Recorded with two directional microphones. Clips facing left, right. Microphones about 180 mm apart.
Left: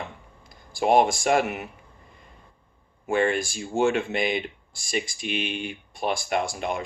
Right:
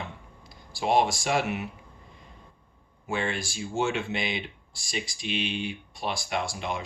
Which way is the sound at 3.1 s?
50° left (ahead or behind).